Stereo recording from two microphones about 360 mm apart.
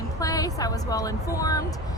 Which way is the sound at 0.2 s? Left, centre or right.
Centre.